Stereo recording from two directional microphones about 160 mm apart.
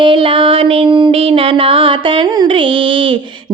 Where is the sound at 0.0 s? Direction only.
30° right (ahead or behind).